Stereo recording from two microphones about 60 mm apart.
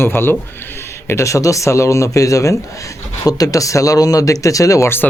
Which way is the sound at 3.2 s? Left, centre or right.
Left.